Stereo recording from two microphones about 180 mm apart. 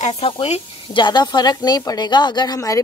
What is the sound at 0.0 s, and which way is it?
Speech, 35° left (ahead or behind).